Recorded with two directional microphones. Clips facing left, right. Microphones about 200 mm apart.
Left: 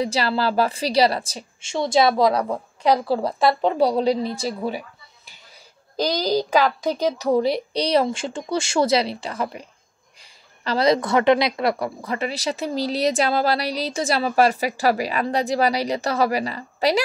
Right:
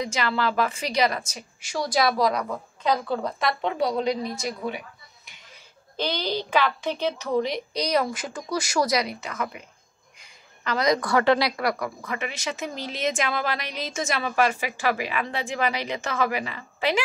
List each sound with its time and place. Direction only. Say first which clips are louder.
0.0 s a woman's voice: left 4 dB; 35° left (ahead or behind)